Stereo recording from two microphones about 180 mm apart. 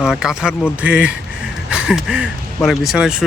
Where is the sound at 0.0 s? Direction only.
5° right (ahead or behind).